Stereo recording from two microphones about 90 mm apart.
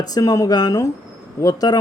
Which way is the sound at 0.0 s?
40° left (ahead or behind).